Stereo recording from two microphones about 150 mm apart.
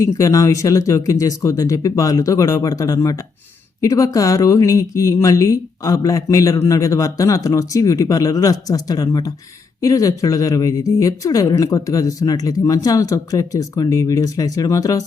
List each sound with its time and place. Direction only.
0.0 s speech: 20° left (ahead or behind)